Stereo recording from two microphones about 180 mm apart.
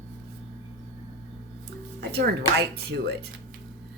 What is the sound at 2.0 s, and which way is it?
Speech, 65° right (ahead or behind).